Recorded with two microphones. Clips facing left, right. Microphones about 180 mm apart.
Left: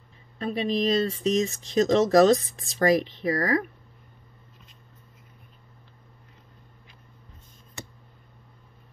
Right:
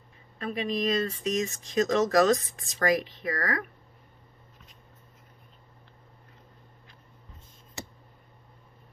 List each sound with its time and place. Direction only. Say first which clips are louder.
0.4 s speech: left 4 dB; 30° left (ahead or behind)